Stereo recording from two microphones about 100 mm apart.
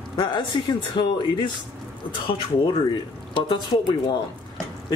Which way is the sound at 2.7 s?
55° left (ahead or behind).